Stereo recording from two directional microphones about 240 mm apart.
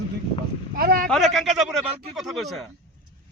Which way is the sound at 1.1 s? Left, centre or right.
Centre.